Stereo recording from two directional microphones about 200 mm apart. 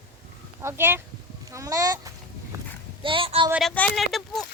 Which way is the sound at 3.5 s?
Centre (ahead or behind).